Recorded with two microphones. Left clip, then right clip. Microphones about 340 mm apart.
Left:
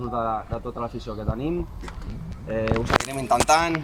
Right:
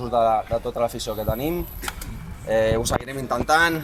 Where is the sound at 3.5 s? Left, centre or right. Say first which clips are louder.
Right 4 dB; centre.